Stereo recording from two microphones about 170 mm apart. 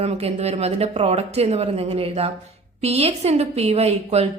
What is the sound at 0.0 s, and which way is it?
A woman's voice, 35° right (ahead or behind).